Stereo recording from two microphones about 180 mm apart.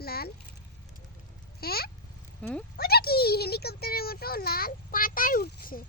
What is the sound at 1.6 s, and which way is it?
Speech, 60° left (ahead or behind).